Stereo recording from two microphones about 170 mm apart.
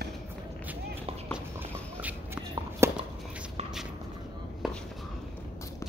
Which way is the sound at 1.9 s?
10° right (ahead or behind).